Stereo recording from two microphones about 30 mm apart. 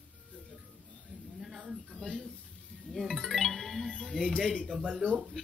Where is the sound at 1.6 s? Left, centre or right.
Right.